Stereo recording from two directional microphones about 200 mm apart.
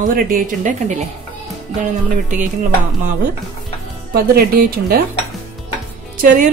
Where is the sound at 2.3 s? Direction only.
40° right (ahead or behind).